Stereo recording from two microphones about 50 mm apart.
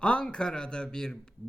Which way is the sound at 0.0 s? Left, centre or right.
Left.